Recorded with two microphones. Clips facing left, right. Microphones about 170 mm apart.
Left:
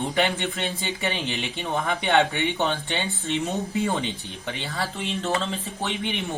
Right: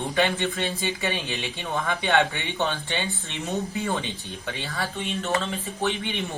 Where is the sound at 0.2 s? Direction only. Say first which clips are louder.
Right 2 dB; 20° left (ahead or behind).